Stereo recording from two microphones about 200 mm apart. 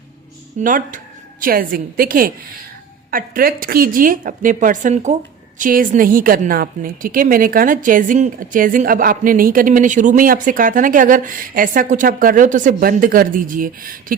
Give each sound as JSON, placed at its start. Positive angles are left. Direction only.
{"t": 0.6, "sound": "a woman's voice", "side_deg": -40}